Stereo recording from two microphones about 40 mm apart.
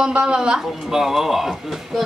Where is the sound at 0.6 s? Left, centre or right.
Centre.